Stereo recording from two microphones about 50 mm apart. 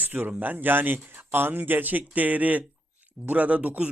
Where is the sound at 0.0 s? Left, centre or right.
Right.